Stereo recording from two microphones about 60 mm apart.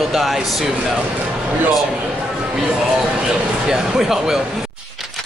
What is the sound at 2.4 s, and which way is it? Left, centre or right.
Speech, centre.